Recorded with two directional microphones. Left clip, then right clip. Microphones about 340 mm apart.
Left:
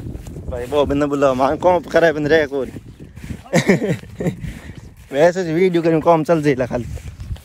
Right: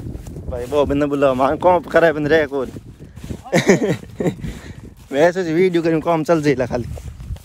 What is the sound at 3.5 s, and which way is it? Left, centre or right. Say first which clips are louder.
Speech: right 2 dB; centre.